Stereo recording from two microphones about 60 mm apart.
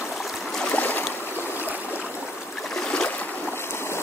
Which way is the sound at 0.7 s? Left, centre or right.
Left.